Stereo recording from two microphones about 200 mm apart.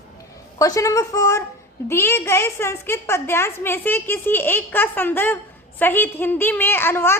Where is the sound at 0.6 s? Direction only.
15° left (ahead or behind).